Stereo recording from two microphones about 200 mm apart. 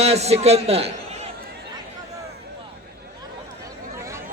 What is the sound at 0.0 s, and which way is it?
A man's voice, 30° right (ahead or behind).